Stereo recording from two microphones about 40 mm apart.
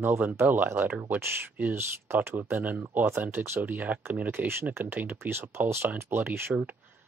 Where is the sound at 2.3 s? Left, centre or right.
Right.